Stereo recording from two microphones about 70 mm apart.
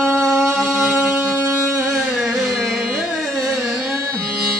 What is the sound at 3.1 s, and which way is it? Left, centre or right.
Music, centre.